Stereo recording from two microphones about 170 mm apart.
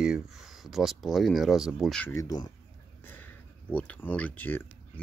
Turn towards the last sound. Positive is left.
turn(degrees=10)  # may be behind; listen again after turning